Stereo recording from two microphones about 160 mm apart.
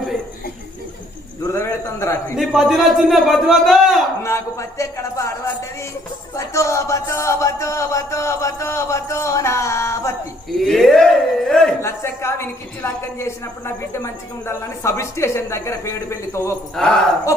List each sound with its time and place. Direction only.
1.5 s a woman's voice: 15° left (ahead or behind)
2.3 s a man's voice: centre (ahead or behind)
4.2 s a man's voice: 20° left (ahead or behind)
6.3 s a woman's voice: 20° left (ahead or behind)
10.5 s speech: centre (ahead or behind)
11.8 s a woman's voice: 15° left (ahead or behind)
16.7 s a man's voice: 5° left (ahead or behind)